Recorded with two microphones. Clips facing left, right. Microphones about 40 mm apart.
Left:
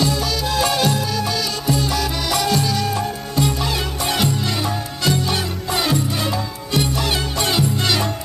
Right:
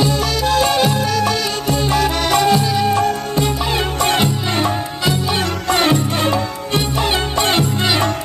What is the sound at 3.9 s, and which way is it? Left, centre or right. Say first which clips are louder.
Music: right 7 dB; right.